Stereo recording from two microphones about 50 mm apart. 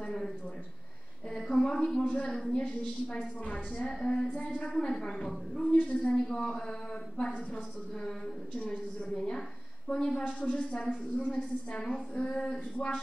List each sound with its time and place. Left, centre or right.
0.0 s a sound: centre
1.3 s a woman's voice: centre
2.0 s a woman's voice: left